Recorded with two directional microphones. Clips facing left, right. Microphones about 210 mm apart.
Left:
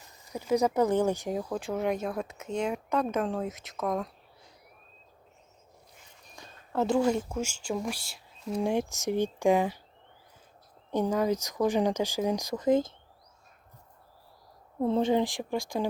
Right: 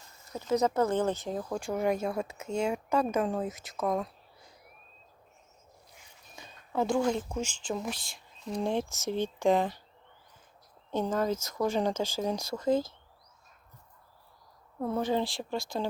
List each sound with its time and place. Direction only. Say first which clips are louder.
0.1 s speech: left 2 dB; 15° left (ahead or behind)
1.5 s speech: right 2 dB; centre (ahead or behind)
6.3 s speech: left 1 dB; centre (ahead or behind)
10.9 s speech: left 3 dB; 15° left (ahead or behind)
14.8 s speech: left 4 dB; 25° left (ahead or behind)